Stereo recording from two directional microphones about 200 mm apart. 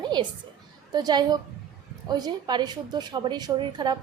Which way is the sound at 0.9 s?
20° right (ahead or behind).